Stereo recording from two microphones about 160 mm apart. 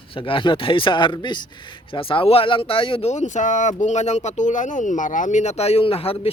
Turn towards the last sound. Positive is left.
turn(degrees=35)  # may be behind; listen again after turning